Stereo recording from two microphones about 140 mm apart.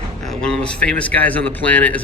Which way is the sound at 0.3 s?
5° left (ahead or behind).